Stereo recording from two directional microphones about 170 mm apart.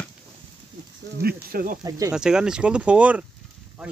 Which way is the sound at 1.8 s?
20° right (ahead or behind).